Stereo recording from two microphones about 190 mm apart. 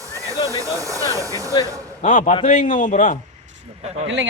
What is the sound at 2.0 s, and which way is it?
A man's voice, 40° left (ahead or behind).